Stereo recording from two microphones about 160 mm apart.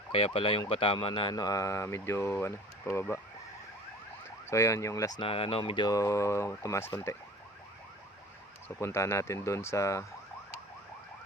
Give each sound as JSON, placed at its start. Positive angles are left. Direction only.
{"t": 0.1, "sound": "speech", "side_deg": 35}
{"t": 4.4, "sound": "speech", "side_deg": 20}
{"t": 8.8, "sound": "speech", "side_deg": 15}